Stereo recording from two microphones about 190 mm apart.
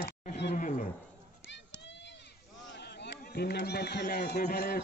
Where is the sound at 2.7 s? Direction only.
60° left (ahead or behind).